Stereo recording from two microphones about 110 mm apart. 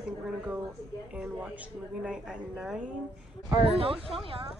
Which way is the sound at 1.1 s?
10° right (ahead or behind).